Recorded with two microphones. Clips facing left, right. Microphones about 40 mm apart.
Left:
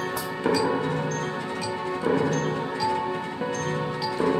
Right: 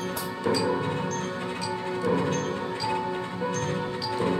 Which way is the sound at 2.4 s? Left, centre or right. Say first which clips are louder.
Left 3 dB; centre.